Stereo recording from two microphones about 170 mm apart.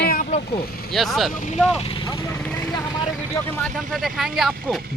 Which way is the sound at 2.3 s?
5° left (ahead or behind).